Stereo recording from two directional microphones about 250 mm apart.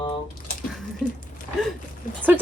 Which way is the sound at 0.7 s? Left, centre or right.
Centre.